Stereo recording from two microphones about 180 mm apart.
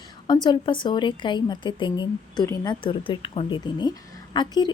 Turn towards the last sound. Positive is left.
turn(degrees=25)  # may be behind; listen again after turning